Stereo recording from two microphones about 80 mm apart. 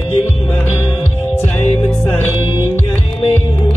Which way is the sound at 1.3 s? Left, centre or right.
Left.